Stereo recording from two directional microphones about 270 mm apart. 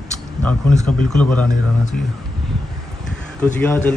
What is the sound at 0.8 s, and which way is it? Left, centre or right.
Speech, centre.